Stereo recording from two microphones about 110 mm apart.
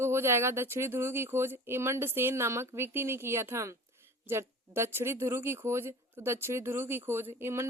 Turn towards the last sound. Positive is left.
turn(degrees=-25)  # may be behind; listen again after turning